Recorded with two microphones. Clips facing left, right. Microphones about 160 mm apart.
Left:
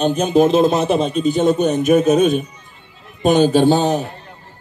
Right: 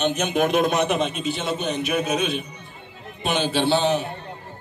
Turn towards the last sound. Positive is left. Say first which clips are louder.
# left 6 dB
turn(degrees=40)  # may be behind; listen again after turning